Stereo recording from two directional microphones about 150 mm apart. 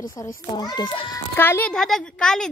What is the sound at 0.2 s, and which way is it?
A child's voice, 20° left (ahead or behind).